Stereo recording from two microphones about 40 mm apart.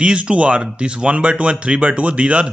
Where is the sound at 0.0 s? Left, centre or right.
Right.